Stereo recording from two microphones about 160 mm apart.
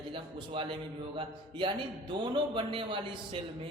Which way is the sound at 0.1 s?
35° right (ahead or behind).